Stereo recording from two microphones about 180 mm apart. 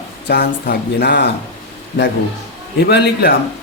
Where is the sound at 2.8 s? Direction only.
70° left (ahead or behind).